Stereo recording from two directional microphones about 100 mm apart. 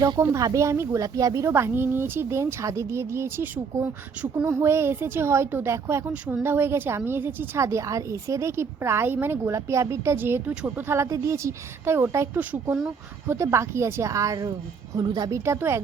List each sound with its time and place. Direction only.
0.2 s speech: 35° right (ahead or behind)
1.5 s a woman's voice: 25° right (ahead or behind)
6.1 s a woman's voice: 15° right (ahead or behind)
10.5 s speech: 10° right (ahead or behind)
10.8 s a woman's voice: 25° right (ahead or behind); by 15.3 s 45° right (ahead or behind)
15.3 s a woman's voice: 30° right (ahead or behind)